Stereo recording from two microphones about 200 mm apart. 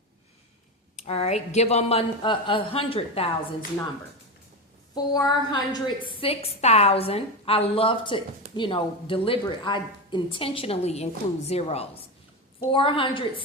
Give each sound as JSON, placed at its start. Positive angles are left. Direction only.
{"t": 0.9, "sound": "a woman's voice", "side_deg": 30}
{"t": 5.1, "sound": "a woman's voice", "side_deg": 20}